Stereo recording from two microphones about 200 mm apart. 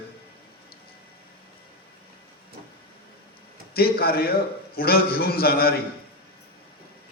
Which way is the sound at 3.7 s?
50° left (ahead or behind).